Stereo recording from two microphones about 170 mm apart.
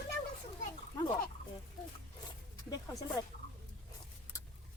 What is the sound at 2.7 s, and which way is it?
Speech, 20° left (ahead or behind).